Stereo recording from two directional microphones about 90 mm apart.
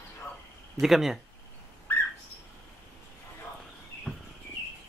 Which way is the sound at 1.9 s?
20° left (ahead or behind).